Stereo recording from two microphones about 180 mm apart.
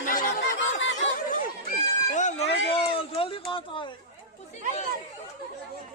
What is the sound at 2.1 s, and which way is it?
Speech, 40° left (ahead or behind).